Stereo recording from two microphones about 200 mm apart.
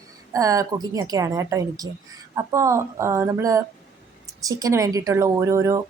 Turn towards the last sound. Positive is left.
turn(degrees=-15)  # may be behind; listen again after turning